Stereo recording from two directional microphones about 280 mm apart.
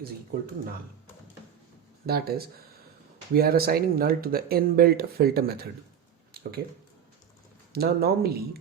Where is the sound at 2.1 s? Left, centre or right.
Right.